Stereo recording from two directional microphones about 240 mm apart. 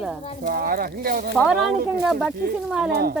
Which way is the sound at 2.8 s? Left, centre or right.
Right.